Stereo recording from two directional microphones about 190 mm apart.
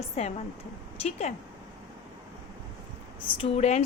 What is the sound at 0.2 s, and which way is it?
Speech, 35° left (ahead or behind).